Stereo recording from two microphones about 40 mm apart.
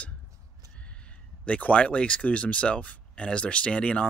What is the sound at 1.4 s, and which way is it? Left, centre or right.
Speech, left.